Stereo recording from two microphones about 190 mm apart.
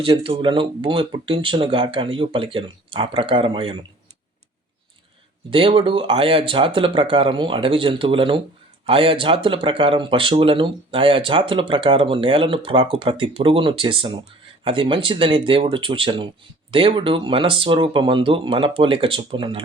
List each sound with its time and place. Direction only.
0.0 s speech: 25° right (ahead or behind)
5.5 s speech: 25° right (ahead or behind)